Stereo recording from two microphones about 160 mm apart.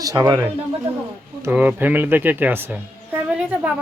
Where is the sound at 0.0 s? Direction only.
20° right (ahead or behind).